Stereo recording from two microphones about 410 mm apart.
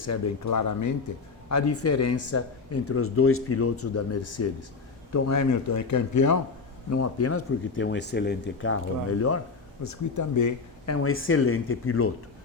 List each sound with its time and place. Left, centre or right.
0.0 s speech: left